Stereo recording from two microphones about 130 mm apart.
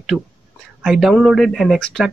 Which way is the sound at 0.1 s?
10° right (ahead or behind).